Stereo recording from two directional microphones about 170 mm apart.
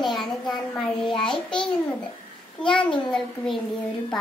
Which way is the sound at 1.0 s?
25° left (ahead or behind).